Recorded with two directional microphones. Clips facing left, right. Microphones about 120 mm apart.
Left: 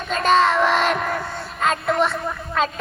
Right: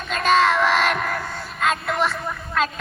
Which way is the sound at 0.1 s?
Centre (ahead or behind).